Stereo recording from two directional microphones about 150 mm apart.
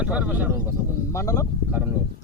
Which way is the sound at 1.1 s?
20° left (ahead or behind).